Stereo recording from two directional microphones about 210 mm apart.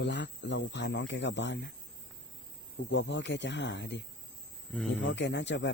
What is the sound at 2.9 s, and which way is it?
Speech, 60° left (ahead or behind).